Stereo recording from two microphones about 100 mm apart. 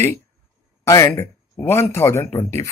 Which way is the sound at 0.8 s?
35° left (ahead or behind).